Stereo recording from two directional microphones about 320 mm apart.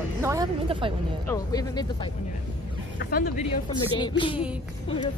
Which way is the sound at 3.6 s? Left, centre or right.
Centre.